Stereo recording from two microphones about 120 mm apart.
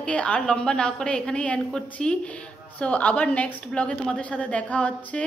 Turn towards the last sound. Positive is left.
turn(degrees=10)  # may be behind; listen again after turning